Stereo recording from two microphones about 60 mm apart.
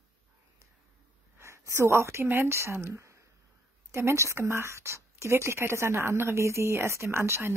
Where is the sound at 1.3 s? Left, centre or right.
Right.